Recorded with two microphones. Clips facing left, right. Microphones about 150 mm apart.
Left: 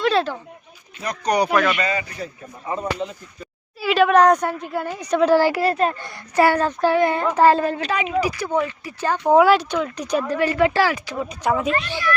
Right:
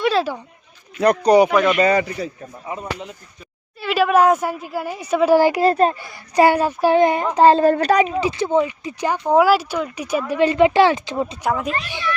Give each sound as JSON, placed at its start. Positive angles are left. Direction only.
{"t": 0.0, "sound": "a sound", "side_deg": -5}
{"t": 0.9, "sound": "speech", "side_deg": -65}
{"t": 1.2, "sound": "speech", "side_deg": -30}
{"t": 1.5, "sound": "a woman's voice", "side_deg": 0}
{"t": 3.8, "sound": "a woman's voice", "side_deg": 0}
{"t": 7.6, "sound": "a woman's voice", "side_deg": -40}
{"t": 8.1, "sound": "speech", "side_deg": -25}
{"t": 9.2, "sound": "a woman's voice", "side_deg": 0}
{"t": 10.3, "sound": "speech", "side_deg": -20}
{"t": 11.4, "sound": "a woman's voice", "side_deg": 0}
{"t": 11.9, "sound": "speech", "side_deg": -20}